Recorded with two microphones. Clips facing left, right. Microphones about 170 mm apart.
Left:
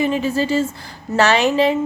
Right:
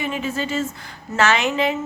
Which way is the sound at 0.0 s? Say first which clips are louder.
Left 6 dB; 35° left (ahead or behind).